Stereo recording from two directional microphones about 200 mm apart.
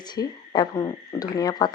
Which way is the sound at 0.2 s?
20° left (ahead or behind).